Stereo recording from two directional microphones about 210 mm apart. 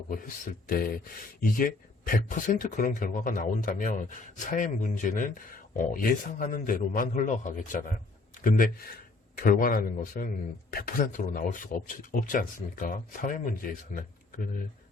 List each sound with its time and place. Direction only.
0.1 s speech: 40° left (ahead or behind)